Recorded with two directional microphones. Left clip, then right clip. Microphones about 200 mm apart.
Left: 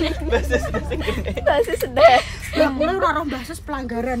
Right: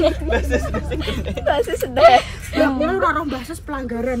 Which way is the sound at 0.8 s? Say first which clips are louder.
Left 1 dB; 35° left (ahead or behind).